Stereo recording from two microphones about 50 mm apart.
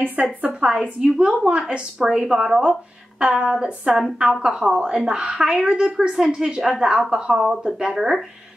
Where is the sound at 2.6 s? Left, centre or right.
Right.